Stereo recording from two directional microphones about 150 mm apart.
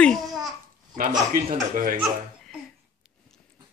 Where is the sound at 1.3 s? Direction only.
70° right (ahead or behind).